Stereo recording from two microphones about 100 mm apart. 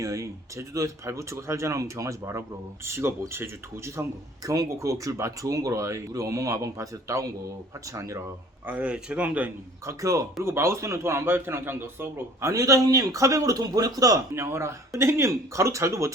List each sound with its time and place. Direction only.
0.0 s a man's voice: 35° right (ahead or behind)
4.4 s speech: 35° right (ahead or behind)
8.6 s speech: 15° right (ahead or behind)
9.8 s a man's voice: 35° right (ahead or behind)
14.3 s a man's voice: 25° right (ahead or behind)